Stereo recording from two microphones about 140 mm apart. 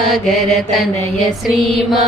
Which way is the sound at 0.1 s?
Centre (ahead or behind).